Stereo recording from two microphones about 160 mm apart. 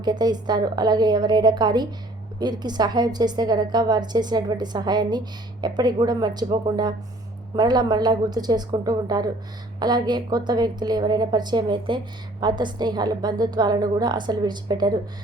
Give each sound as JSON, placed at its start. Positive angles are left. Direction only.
{"t": 0.0, "sound": "a woman's voice", "side_deg": -25}